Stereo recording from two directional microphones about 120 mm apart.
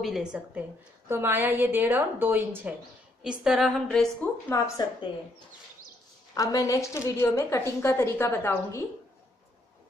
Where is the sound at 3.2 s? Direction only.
5° right (ahead or behind).